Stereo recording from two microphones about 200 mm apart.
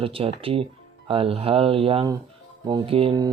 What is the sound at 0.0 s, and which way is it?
Speech, 30° right (ahead or behind).